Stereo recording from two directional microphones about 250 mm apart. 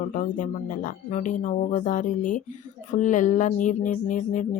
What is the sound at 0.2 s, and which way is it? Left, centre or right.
Speech, left.